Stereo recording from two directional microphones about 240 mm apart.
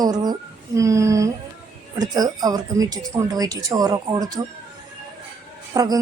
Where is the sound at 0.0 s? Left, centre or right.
Centre.